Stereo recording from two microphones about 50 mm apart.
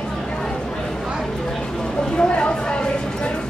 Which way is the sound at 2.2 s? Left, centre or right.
Centre.